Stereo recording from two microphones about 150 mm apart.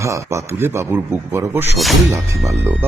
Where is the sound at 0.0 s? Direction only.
20° right (ahead or behind).